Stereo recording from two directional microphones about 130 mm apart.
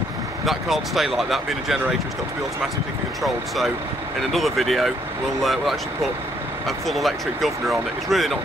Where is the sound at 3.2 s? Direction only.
Centre (ahead or behind).